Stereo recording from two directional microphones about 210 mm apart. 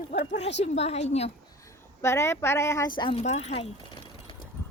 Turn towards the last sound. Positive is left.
turn(degrees=25)  # may be behind; listen again after turning